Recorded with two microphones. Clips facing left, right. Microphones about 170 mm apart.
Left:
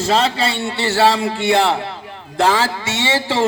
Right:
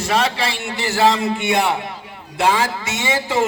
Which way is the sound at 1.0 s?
20° right (ahead or behind).